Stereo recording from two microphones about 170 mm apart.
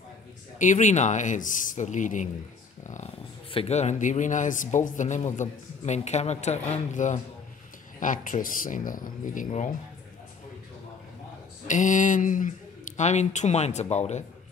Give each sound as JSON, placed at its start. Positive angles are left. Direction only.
{"t": 0.6, "sound": "speech", "side_deg": 45}
{"t": 3.5, "sound": "speech", "side_deg": 40}
{"t": 11.6, "sound": "speech", "side_deg": 50}